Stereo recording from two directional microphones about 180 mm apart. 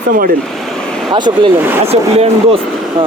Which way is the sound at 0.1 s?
50° right (ahead or behind).